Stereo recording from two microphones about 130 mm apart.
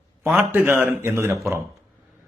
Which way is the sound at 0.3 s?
15° right (ahead or behind).